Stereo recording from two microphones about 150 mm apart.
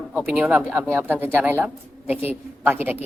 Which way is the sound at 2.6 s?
10° right (ahead or behind).